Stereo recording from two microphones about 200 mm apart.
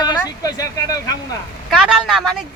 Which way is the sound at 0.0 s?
20° left (ahead or behind).